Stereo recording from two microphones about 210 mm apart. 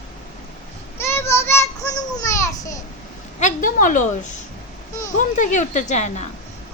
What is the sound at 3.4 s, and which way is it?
Speech, 40° left (ahead or behind).